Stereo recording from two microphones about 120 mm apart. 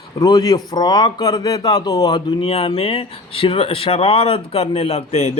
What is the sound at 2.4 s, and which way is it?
Speech, 55° left (ahead or behind).